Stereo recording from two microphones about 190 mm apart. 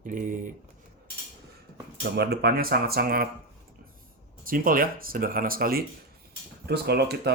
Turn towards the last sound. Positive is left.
turn(degrees=-60)  # may be behind; listen again after turning